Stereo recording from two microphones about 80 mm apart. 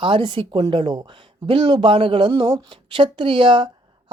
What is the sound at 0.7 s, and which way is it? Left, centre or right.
A woman's voice, right.